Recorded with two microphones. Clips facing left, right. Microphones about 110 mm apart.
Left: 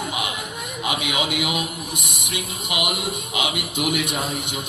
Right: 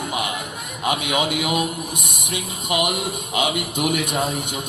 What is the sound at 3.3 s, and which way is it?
Speech, 40° right (ahead or behind).